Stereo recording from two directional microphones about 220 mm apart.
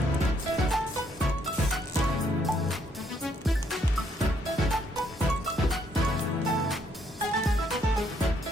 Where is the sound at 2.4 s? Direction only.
Centre (ahead or behind).